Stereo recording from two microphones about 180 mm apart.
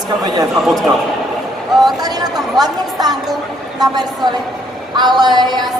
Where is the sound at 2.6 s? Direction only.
20° right (ahead or behind).